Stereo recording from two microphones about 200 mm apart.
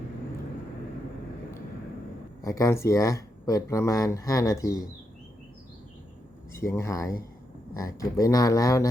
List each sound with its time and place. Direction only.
2.4 s speech: 15° left (ahead or behind)
6.5 s speech: 15° left (ahead or behind)